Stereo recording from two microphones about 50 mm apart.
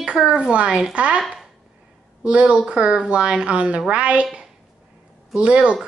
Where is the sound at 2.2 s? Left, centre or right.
Right.